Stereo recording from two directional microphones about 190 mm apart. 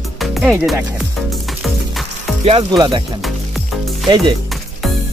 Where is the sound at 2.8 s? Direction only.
25° right (ahead or behind).